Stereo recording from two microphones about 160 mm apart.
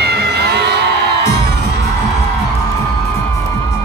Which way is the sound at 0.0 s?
90° right.